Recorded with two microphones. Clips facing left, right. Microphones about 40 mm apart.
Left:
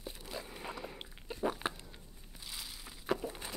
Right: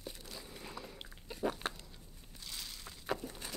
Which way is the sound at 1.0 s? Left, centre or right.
Centre.